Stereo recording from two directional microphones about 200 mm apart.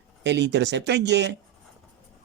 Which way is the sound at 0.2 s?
60° right (ahead or behind).